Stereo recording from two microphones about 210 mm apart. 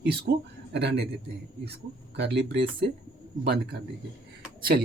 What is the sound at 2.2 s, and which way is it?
Speech, 55° right (ahead or behind).